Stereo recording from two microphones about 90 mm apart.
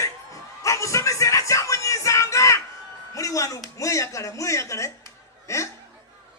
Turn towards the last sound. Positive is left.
turn(degrees=35)  # may be behind; listen again after turning